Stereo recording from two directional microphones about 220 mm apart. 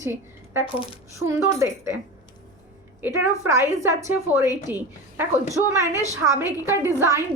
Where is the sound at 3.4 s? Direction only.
10° right (ahead or behind).